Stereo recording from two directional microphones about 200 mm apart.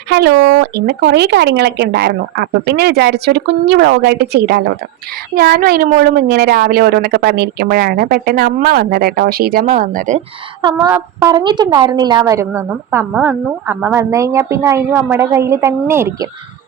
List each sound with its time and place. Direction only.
0.1 s speech: 60° right (ahead or behind); by 10.2 s 40° right (ahead or behind)
10.8 s a woman's voice: 10° right (ahead or behind)